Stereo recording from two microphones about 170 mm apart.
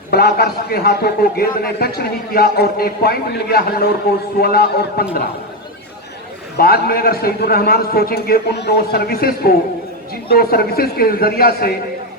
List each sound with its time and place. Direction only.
0.1 s a man's voice: 65° left (ahead or behind)
6.6 s a man's voice: 60° left (ahead or behind)